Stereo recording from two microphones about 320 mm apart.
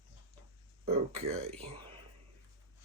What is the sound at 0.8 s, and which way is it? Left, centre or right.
Speech, centre.